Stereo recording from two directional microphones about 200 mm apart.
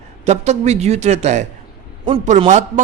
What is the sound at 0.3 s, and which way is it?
A man's voice, 35° right (ahead or behind).